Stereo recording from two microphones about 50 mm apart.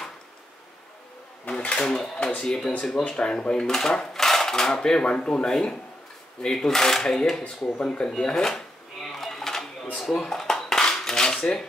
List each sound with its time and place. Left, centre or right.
1.6 s drawer open or close: left
2.3 s speech: centre
9.1 s cash register: centre
9.9 s dishes: centre